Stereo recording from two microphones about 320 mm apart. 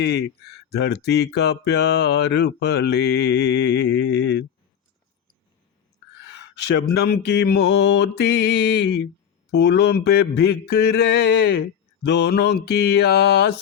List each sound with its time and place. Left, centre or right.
0.0 s speech: left
6.3 s speech: left